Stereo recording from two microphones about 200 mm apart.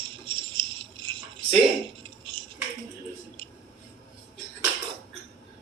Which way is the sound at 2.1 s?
25° right (ahead or behind).